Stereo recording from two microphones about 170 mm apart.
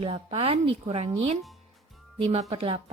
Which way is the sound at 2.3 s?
35° right (ahead or behind).